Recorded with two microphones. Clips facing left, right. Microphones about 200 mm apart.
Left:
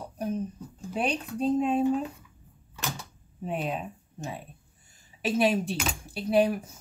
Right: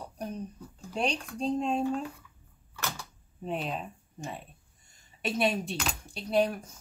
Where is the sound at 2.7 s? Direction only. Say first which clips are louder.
Left 2 dB; 20° left (ahead or behind).